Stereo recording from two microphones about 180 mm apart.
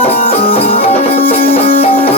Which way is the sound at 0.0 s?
35° left (ahead or behind).